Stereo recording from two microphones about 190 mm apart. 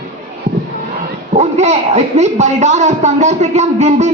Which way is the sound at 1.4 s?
35° right (ahead or behind).